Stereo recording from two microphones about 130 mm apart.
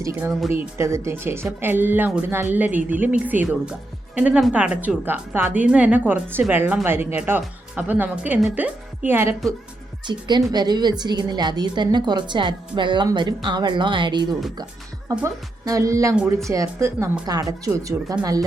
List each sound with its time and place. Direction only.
0.0 s speech: 20° right (ahead or behind)
0.3 s speech: centre (ahead or behind)
0.5 s a woman's voice: 20° right (ahead or behind)
10.1 s a woman's voice: 35° right (ahead or behind)